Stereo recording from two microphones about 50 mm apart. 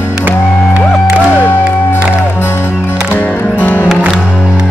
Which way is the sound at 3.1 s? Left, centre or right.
Left.